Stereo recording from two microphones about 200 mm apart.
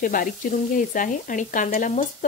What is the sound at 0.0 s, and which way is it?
Speech, 45° left (ahead or behind).